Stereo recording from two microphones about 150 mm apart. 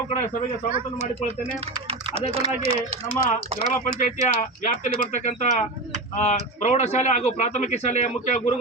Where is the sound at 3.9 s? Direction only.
50° left (ahead or behind).